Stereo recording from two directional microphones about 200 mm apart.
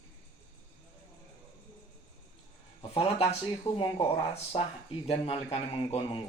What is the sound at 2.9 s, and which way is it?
Speech, 30° left (ahead or behind).